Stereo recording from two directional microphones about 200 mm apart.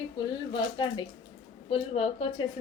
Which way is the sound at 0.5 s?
20° left (ahead or behind).